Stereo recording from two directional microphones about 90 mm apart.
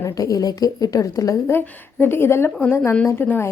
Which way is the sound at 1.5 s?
25° left (ahead or behind).